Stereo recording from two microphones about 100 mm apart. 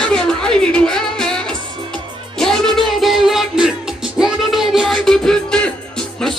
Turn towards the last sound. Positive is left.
turn(degrees=5)  # may be behind; listen again after turning